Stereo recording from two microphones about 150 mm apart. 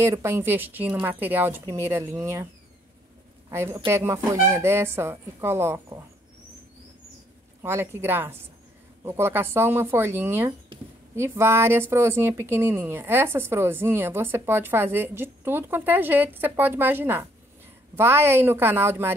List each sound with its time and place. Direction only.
0.0 s speech: 15° right (ahead or behind)
3.4 s speech: 20° right (ahead or behind)
7.6 s speech: 15° right (ahead or behind)
10.7 s a sound: 35° right (ahead or behind)
11.1 s speech: 15° right (ahead or behind)